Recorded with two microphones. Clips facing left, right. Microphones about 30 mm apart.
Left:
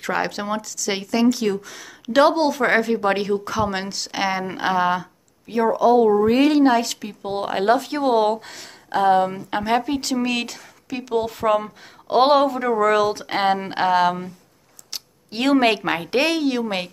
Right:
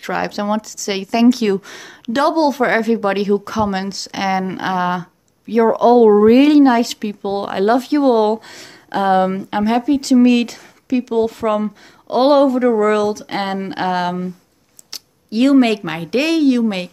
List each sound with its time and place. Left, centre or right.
0.1 s speech: centre
1.3 s speech: right
2.3 s speech: centre
5.7 s speech: right
6.2 s speech: centre
7.4 s speech: centre
9.0 s speech: right
9.5 s speech: centre
9.8 s speech: centre